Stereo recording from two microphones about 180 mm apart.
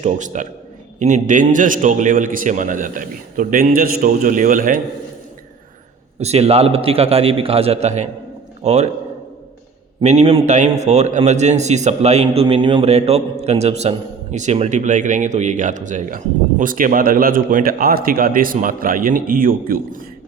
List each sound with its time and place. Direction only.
0.0 s a man's voice: 40° right (ahead or behind)
6.1 s a man's voice: 35° right (ahead or behind)
10.0 s a man's voice: 40° right (ahead or behind)